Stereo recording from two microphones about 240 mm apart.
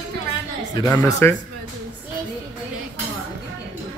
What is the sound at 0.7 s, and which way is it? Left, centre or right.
Speech, centre.